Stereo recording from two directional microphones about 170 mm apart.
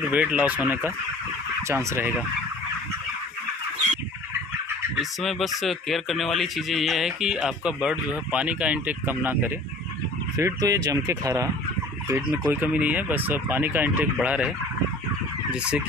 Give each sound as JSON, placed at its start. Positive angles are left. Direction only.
{"t": 0.1, "sound": "fowl", "side_deg": -10}
{"t": 4.9, "sound": "speech", "side_deg": 0}
{"t": 12.1, "sound": "fowl", "side_deg": -10}
{"t": 15.5, "sound": "speech", "side_deg": -5}